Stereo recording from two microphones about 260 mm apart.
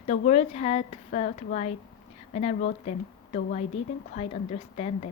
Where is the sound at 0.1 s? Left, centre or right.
Left.